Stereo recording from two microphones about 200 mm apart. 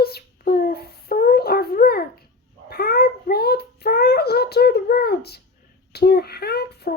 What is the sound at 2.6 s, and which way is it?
Child singing, 50° left (ahead or behind).